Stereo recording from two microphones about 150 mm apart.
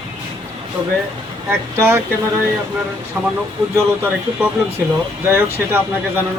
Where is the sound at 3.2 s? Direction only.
5° right (ahead or behind).